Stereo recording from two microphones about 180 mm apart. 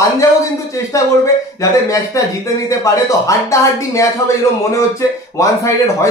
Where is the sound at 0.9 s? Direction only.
15° left (ahead or behind).